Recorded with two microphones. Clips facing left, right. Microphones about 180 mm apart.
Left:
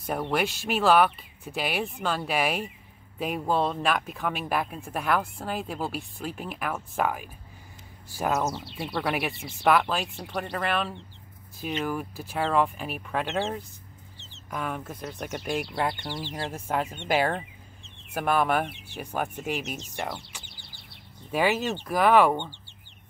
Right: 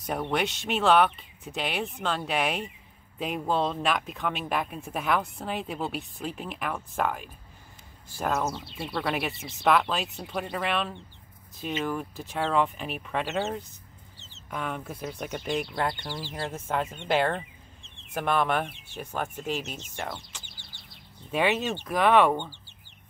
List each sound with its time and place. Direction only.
0.0 s speech: 5° left (ahead or behind)
16.2 s speech: 10° right (ahead or behind)
16.5 s speech: 10° left (ahead or behind)
16.9 s speech: centre (ahead or behind)
21.3 s speech: 5° left (ahead or behind)